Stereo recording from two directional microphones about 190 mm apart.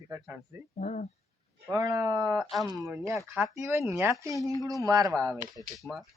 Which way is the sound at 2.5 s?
Centre (ahead or behind).